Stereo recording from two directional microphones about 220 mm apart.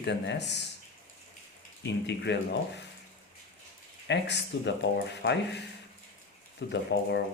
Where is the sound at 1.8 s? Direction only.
50° left (ahead or behind).